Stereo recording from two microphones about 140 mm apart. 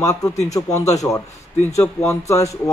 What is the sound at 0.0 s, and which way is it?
Speech, 25° left (ahead or behind).